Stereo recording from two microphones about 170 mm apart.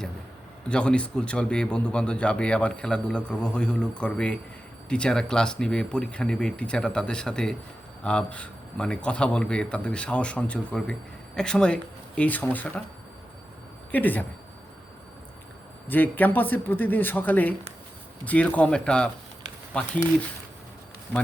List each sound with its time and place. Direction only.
0.7 s a man's voice: 5° left (ahead or behind)
13.9 s a man's voice: 10° left (ahead or behind)
15.9 s a man's voice: 10° left (ahead or behind)